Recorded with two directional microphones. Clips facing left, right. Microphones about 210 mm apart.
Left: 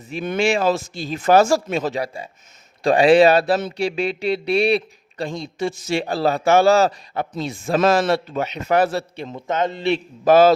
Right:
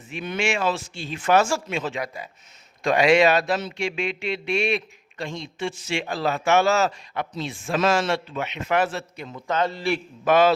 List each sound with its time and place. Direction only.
0.3 s speech: 35° left (ahead or behind)
10.2 s speech: 35° left (ahead or behind)